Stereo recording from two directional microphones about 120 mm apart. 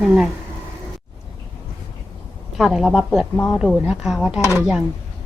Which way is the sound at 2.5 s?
Centre (ahead or behind).